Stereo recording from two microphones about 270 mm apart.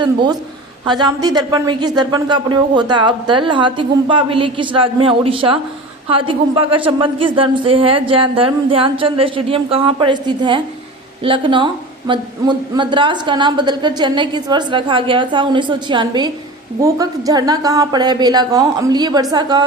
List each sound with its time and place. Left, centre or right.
0.0 s a woman's voice: centre